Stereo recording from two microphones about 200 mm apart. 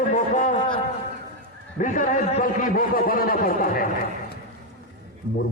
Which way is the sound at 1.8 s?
40° left (ahead or behind).